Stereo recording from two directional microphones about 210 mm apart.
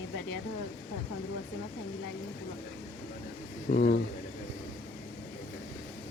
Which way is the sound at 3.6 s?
50° left (ahead or behind).